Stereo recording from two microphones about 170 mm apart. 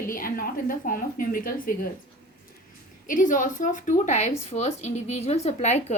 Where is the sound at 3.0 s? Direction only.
50° left (ahead or behind).